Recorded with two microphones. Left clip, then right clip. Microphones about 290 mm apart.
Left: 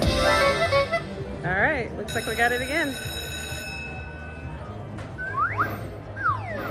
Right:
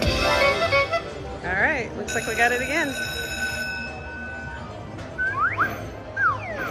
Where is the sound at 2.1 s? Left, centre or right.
Centre.